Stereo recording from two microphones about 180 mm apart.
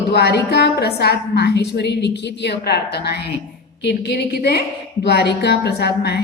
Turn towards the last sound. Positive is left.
turn(degrees=65)  # may be behind; listen again after turning